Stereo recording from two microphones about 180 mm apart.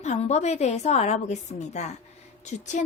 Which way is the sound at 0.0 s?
40° left (ahead or behind).